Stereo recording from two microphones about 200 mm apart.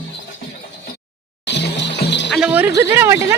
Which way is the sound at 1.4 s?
60° left (ahead or behind).